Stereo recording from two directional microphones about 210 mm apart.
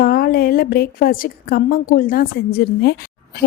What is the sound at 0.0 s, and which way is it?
A woman's voice, 45° left (ahead or behind).